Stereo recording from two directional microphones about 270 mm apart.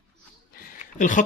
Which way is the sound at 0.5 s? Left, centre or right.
Left.